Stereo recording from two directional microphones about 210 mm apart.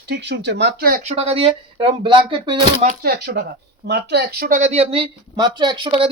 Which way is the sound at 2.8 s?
45° right (ahead or behind).